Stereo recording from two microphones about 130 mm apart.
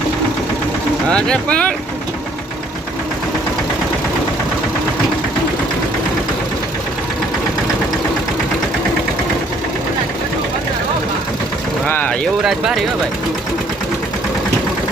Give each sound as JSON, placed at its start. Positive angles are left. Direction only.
{"t": 1.1, "sound": "speech", "side_deg": 5}
{"t": 11.9, "sound": "vehicle", "side_deg": 15}
{"t": 12.5, "sound": "speech", "side_deg": 0}